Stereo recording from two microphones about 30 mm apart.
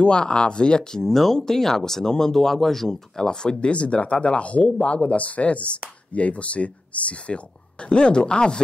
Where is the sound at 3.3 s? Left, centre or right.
Left.